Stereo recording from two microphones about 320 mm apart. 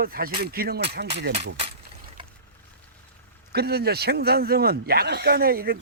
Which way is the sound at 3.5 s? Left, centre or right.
Right.